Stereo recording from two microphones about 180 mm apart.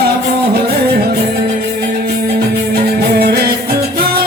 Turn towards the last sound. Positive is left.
turn(degrees=-60)  # may be behind; listen again after turning